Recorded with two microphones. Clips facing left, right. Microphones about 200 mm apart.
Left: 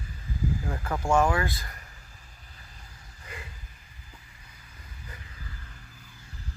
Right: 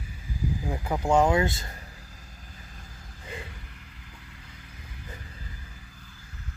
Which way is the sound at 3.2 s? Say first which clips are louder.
Right 5 dB; 25° right (ahead or behind).